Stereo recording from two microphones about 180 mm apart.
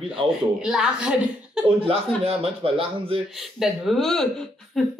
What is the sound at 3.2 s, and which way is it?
Speech, centre (ahead or behind).